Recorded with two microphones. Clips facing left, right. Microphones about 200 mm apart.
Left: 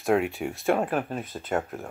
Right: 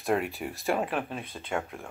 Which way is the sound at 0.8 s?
45° left (ahead or behind).